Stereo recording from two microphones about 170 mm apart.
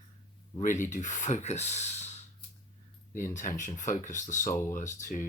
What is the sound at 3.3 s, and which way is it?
Speech, 50° left (ahead or behind).